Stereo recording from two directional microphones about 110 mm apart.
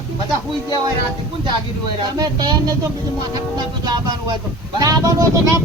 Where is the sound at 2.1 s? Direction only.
35° right (ahead or behind).